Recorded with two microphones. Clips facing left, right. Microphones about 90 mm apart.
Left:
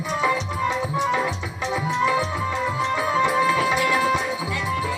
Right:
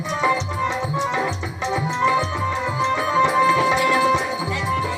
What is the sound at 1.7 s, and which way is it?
Music, 5° left (ahead or behind).